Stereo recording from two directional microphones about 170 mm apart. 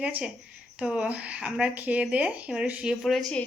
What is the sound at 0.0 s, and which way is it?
Speech, 5° right (ahead or behind).